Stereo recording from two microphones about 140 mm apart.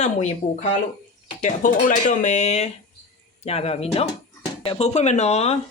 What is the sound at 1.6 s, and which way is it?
Speech, 70° left (ahead or behind).